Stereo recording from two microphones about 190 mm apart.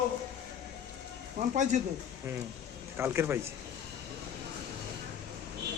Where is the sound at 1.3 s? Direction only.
40° right (ahead or behind).